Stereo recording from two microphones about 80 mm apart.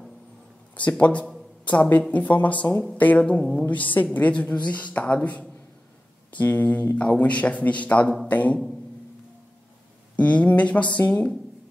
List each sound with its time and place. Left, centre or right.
0.7 s a woman's voice: centre
10.1 s a woman's voice: centre